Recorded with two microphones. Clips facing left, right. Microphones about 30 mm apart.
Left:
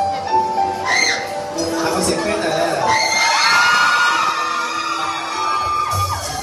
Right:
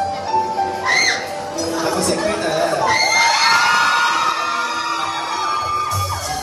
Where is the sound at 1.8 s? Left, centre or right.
Centre.